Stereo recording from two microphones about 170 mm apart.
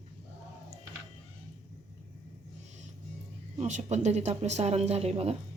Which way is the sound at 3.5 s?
45° right (ahead or behind).